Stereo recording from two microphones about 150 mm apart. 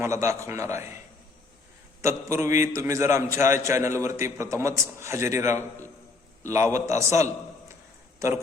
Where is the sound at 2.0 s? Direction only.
20° right (ahead or behind).